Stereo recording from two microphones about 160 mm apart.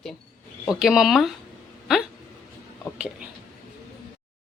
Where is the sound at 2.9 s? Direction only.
5° right (ahead or behind).